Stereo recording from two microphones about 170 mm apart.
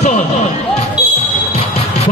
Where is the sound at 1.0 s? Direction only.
5° right (ahead or behind).